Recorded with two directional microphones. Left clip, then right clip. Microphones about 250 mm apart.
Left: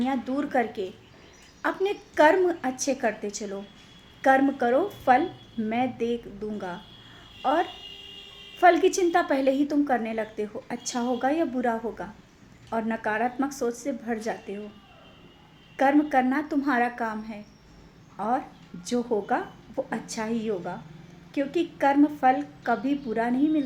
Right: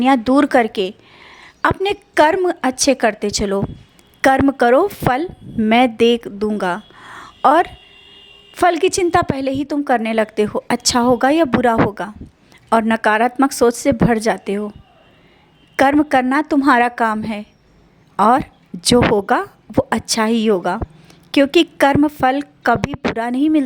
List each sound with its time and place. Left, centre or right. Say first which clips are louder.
0.0 s a woman's voice: right 15 dB; right
15.7 s a woman's voice: right 8 dB; right